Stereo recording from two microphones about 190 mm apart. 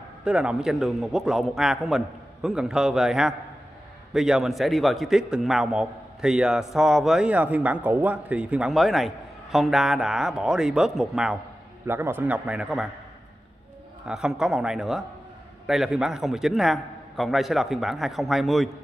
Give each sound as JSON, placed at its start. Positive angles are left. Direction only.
{"t": 0.2, "sound": "a man's voice", "side_deg": -5}
{"t": 14.0, "sound": "a man's voice", "side_deg": -5}